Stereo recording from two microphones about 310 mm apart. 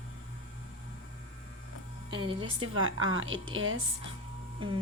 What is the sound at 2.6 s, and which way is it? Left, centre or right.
A woman's voice, right.